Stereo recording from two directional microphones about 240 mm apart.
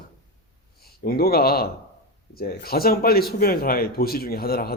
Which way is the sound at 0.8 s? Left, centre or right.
Left.